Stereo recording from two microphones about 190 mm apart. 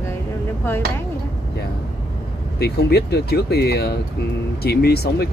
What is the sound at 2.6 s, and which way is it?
Speech, 55° left (ahead or behind).